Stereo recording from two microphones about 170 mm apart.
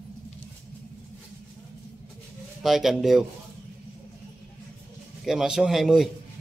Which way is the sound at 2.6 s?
Centre (ahead or behind).